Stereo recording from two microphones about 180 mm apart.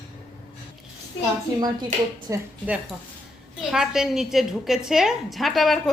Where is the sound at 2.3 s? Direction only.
15° right (ahead or behind).